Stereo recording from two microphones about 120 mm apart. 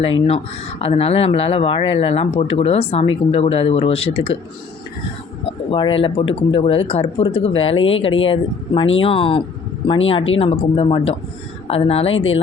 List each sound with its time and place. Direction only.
0.0 s speech: 55° left (ahead or behind)
5.5 s speech: 45° left (ahead or behind)